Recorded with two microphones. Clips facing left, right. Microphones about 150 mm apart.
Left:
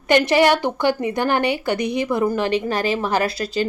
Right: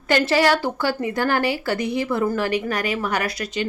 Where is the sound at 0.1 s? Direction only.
20° left (ahead or behind).